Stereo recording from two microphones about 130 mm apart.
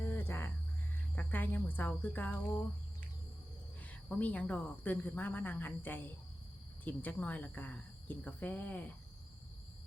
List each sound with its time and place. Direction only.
0.0 s music: 15° left (ahead or behind)
1.1 s speech: 15° left (ahead or behind)
3.8 s a woman's voice: 10° left (ahead or behind)